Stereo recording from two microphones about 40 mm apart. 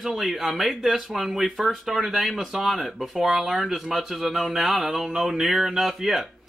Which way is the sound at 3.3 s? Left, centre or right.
Centre.